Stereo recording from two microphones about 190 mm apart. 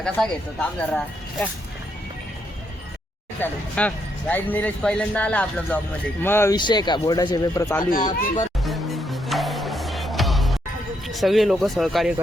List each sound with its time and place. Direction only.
0.0 s speech: 5° left (ahead or behind)
3.4 s speech: 10° left (ahead or behind)
6.6 s speech: 25° left (ahead or behind)
7.9 s speech: 45° left (ahead or behind)
8.6 s music: centre (ahead or behind)
11.1 s speech: centre (ahead or behind)